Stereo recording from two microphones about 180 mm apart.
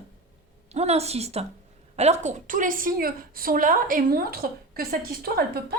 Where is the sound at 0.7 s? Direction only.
35° right (ahead or behind).